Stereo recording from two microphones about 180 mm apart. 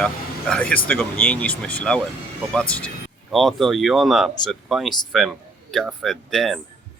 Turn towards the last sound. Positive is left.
turn(degrees=0)  # may be behind; listen again after turning